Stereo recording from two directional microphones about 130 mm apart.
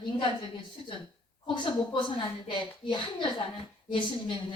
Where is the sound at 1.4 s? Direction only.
35° left (ahead or behind).